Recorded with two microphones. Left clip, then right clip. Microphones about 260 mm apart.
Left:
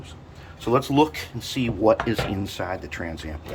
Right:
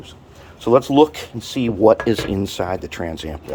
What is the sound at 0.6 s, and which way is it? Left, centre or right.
Speech, right.